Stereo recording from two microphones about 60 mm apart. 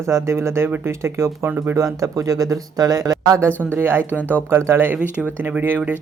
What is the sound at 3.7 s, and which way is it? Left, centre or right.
Speech, right.